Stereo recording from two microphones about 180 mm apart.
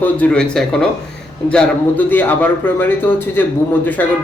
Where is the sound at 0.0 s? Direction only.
5° left (ahead or behind).